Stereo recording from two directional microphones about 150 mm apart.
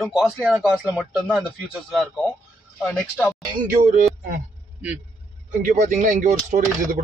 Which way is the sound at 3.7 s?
60° right (ahead or behind).